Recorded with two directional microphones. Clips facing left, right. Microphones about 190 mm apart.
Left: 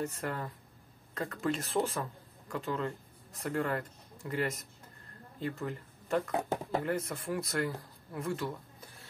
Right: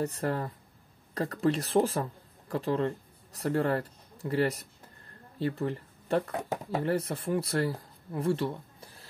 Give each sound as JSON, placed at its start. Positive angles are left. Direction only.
{"t": 0.0, "sound": "speech", "side_deg": -35}